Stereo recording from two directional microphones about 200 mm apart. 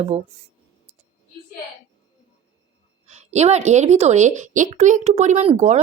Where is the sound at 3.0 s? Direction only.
35° right (ahead or behind).